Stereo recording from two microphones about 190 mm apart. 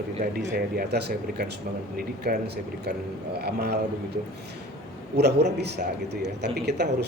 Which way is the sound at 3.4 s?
60° right (ahead or behind).